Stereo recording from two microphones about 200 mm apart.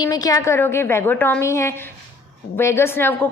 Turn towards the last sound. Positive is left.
turn(degrees=10)  # may be behind; listen again after turning